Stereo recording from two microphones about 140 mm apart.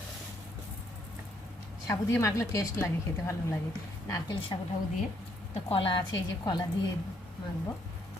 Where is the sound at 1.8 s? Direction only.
25° left (ahead or behind).